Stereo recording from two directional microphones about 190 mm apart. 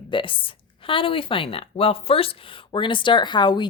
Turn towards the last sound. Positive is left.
turn(degrees=25)  # may be behind; listen again after turning